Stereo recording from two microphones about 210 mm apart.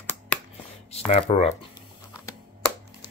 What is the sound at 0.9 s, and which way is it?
Speech, 30° left (ahead or behind).